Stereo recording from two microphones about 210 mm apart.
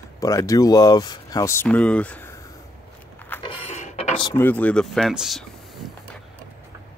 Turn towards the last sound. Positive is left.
turn(degrees=0)  # may be behind; listen again after turning